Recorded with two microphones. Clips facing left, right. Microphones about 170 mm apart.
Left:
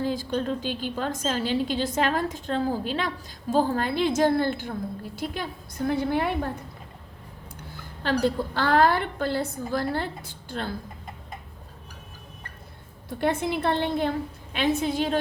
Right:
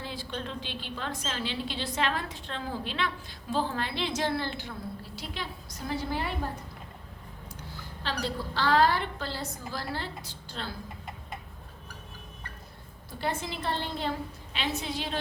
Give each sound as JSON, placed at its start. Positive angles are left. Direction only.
{"t": 0.0, "sound": "a woman's voice", "side_deg": 45}
{"t": 8.0, "sound": "a woman's voice", "side_deg": 50}
{"t": 13.1, "sound": "a woman's voice", "side_deg": 60}